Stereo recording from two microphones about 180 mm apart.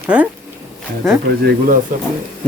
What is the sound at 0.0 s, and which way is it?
Speech, 10° right (ahead or behind).